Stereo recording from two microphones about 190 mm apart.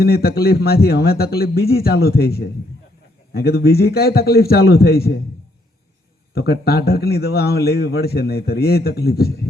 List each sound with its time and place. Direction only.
0.0 s a man's voice: 55° left (ahead or behind)
6.3 s a man's voice: 55° left (ahead or behind)